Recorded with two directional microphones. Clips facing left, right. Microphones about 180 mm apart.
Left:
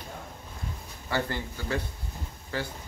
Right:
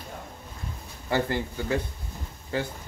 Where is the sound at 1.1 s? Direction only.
15° right (ahead or behind).